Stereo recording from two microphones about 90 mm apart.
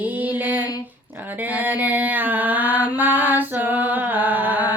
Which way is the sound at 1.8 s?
20° right (ahead or behind).